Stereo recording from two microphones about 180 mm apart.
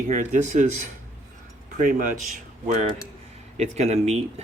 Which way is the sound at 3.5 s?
40° right (ahead or behind).